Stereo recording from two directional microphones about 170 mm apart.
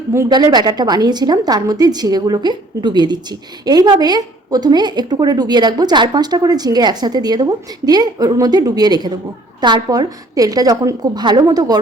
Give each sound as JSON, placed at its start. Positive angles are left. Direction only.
{"t": 0.1, "sound": "a woman's voice", "side_deg": -20}